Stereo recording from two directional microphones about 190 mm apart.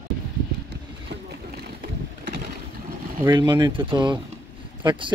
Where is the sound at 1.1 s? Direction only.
60° right (ahead or behind).